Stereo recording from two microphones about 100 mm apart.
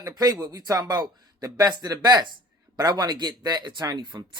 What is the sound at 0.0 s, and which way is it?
Speech, 35° right (ahead or behind).